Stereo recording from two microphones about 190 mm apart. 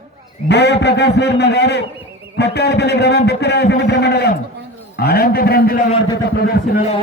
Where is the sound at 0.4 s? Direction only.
60° left (ahead or behind).